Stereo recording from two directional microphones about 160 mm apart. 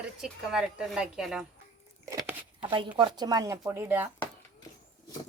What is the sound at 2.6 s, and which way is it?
Speech, 30° right (ahead or behind).